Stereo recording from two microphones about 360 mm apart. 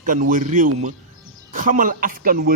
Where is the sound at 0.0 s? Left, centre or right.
Right.